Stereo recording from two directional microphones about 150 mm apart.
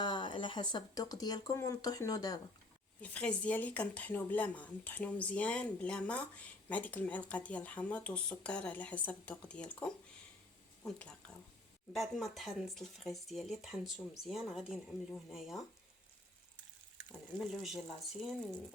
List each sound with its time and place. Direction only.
0.0 s speech: 30° left (ahead or behind)
3.0 s speech: 10° left (ahead or behind)
17.3 s speech: centre (ahead or behind)